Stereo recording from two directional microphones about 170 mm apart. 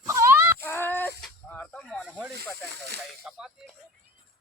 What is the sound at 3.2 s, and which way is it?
Speech, centre (ahead or behind).